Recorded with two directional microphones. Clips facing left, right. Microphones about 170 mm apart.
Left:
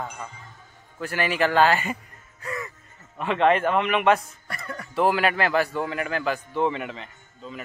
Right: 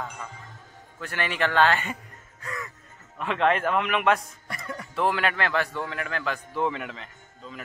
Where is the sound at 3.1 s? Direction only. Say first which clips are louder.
Left 3 dB; centre (ahead or behind).